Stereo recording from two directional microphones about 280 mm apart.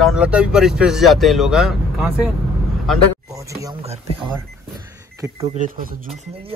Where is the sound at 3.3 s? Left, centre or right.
Centre.